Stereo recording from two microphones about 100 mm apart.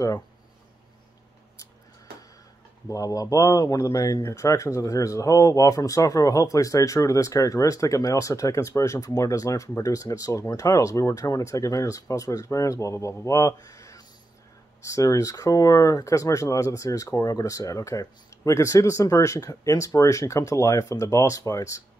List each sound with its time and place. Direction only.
2.9 s speech: 35° left (ahead or behind)